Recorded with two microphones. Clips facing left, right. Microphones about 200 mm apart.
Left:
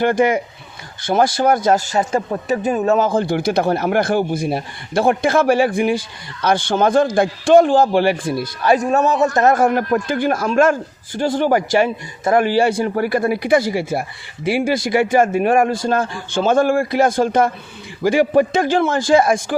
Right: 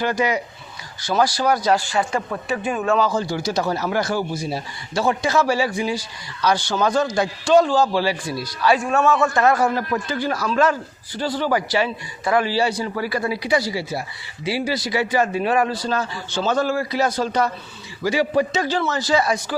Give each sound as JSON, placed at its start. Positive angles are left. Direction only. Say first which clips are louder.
{"t": 0.0, "sound": "speech", "louder": "left 6 dB", "side_deg": 50}